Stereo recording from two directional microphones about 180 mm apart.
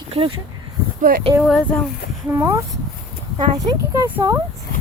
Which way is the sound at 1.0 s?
50° right (ahead or behind).